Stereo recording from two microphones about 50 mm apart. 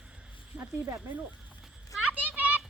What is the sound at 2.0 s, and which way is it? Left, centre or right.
Children playing, right.